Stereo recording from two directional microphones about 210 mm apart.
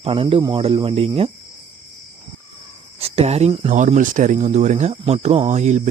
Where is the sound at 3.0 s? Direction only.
30° right (ahead or behind).